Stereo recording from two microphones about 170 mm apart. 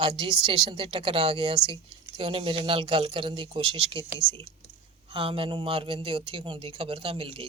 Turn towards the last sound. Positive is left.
turn(degrees=-30)  # may be behind; listen again after turning